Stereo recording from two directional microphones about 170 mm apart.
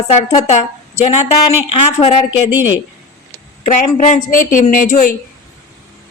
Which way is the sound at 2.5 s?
10° right (ahead or behind).